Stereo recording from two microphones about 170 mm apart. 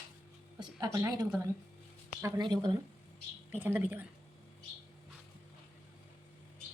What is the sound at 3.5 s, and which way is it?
Speech, 10° right (ahead or behind).